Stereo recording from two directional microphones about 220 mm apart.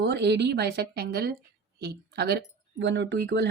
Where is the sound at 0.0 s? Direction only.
50° right (ahead or behind).